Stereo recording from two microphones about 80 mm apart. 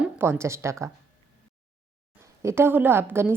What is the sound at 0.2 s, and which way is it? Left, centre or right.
Speech, right.